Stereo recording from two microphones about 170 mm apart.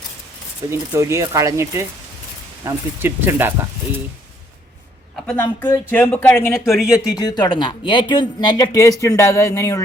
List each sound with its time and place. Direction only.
0.7 s speech: 15° right (ahead or behind)
5.2 s speech: 10° left (ahead or behind)
6.7 s speech: 5° right (ahead or behind)
7.1 s speech: 20° left (ahead or behind)